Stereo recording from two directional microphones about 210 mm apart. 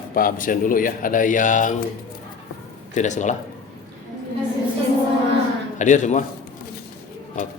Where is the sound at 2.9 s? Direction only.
35° left (ahead or behind).